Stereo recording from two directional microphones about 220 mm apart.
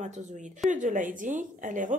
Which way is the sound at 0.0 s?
35° right (ahead or behind).